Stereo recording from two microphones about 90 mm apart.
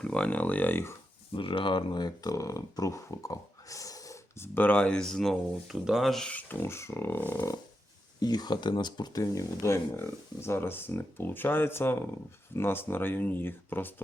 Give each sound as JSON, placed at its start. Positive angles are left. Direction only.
{"t": 0.0, "sound": "speech", "side_deg": 10}
{"t": 1.3, "sound": "speech", "side_deg": 75}
{"t": 4.5, "sound": "speech", "side_deg": 15}
{"t": 6.2, "sound": "speech", "side_deg": 20}
{"t": 8.2, "sound": "speech", "side_deg": 50}
{"t": 9.2, "sound": "speech", "side_deg": 35}